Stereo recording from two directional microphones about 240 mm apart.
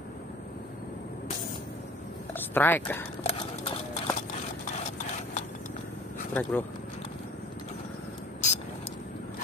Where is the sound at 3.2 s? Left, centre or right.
Left.